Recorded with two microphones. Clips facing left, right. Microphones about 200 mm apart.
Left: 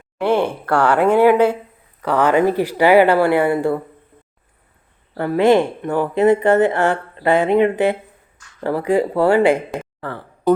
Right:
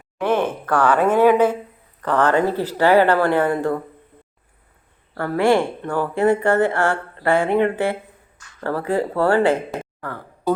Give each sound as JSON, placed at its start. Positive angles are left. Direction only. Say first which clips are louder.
{"t": 0.2, "sound": "speech", "louder": "left 2 dB", "side_deg": 10}
{"t": 5.1, "sound": "speech", "louder": "left 3 dB", "side_deg": 20}